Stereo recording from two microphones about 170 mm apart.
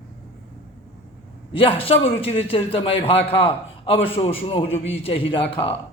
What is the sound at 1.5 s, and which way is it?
A man's voice, 30° left (ahead or behind).